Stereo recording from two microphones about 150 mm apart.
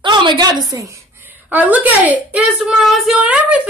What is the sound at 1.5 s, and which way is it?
A woman's voice, 10° right (ahead or behind).